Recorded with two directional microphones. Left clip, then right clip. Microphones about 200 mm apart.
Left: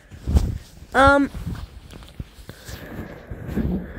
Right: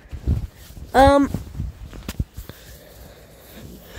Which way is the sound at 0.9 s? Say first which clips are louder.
Right 1 dB; 10° right (ahead or behind).